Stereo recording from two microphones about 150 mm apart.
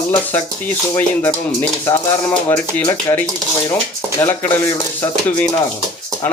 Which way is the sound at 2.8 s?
10° left (ahead or behind).